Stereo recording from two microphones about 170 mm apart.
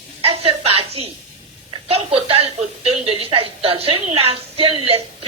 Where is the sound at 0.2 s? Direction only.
35° right (ahead or behind).